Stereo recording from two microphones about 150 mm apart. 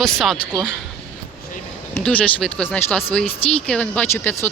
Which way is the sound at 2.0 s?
10° left (ahead or behind).